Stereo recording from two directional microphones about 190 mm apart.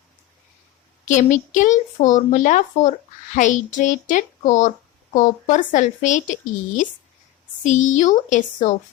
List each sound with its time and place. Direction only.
1.0 s speech: 40° left (ahead or behind)